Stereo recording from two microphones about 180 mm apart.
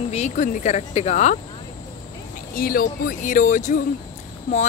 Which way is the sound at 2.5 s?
55° left (ahead or behind).